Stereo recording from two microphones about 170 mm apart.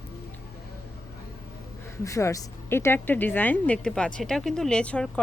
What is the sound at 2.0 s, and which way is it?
A woman's voice, 15° left (ahead or behind).